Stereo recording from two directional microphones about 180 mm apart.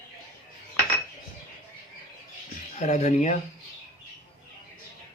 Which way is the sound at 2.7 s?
40° left (ahead or behind).